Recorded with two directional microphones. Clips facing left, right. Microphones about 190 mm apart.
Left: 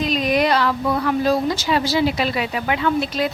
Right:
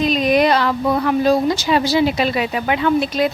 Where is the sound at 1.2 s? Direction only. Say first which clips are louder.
Right 3 dB; 20° right (ahead or behind).